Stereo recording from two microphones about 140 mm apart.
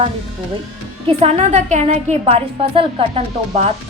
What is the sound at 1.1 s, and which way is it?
A woman's voice, 50° right (ahead or behind).